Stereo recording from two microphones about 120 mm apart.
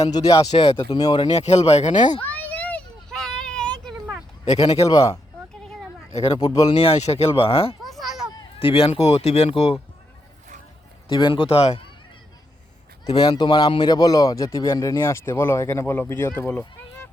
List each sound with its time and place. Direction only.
0.1 s speech: 30° left (ahead or behind)
1.3 s speech: 60° left (ahead or behind); by 2.1 s 90° left
2.3 s children playing: 10° left (ahead or behind)
4.5 s speech: 55° left (ahead or behind)
4.9 s speech: 30° left (ahead or behind)
5.6 s a sound: 5° left (ahead or behind)
6.2 s speech: 35° left (ahead or behind)
6.7 s speech: 60° left (ahead or behind)
7.9 s a sound: centre (ahead or behind)
8.5 s speech: 50° left (ahead or behind)
11.1 s speech: 40° left (ahead or behind)
13.1 s speech: 40° left (ahead or behind); by 17.1 s 15° left (ahead or behind)